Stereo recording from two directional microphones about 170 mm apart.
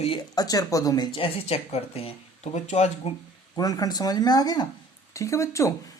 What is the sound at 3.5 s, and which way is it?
Speech, 20° left (ahead or behind).